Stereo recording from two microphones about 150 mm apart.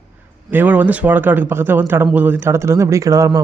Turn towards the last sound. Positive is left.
turn(degrees=-20)  # may be behind; listen again after turning